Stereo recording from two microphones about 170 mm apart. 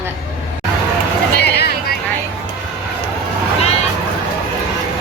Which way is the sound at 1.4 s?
75° left (ahead or behind).